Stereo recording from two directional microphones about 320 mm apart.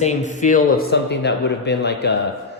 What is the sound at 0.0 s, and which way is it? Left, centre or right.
Speech, left.